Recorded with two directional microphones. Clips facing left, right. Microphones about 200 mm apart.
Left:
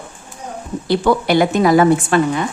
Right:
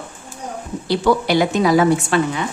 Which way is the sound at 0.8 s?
55° left (ahead or behind).